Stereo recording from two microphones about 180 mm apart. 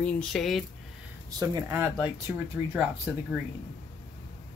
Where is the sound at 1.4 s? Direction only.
15° right (ahead or behind).